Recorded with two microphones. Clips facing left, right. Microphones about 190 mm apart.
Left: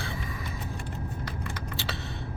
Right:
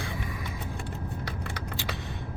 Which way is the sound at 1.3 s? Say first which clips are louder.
Even; 70° right (ahead or behind).